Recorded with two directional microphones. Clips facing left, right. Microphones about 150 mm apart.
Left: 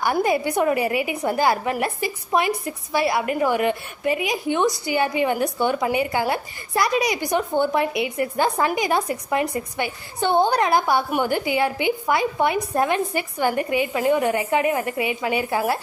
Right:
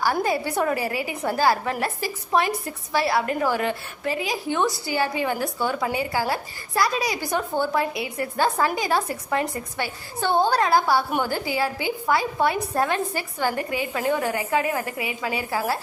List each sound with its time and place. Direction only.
0.0 s a woman's voice: 15° left (ahead or behind)